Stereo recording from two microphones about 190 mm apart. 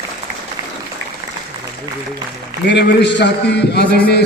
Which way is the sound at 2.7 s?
65° left (ahead or behind).